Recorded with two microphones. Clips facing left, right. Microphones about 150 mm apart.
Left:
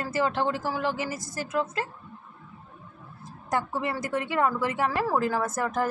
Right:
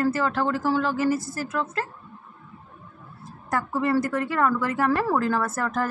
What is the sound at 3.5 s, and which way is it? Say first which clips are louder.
A woman's voice: right 4 dB; 20° left (ahead or behind).